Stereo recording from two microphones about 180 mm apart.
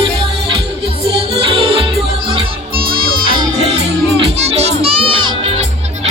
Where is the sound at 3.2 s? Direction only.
25° right (ahead or behind).